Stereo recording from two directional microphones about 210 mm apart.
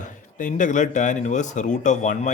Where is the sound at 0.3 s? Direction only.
40° left (ahead or behind).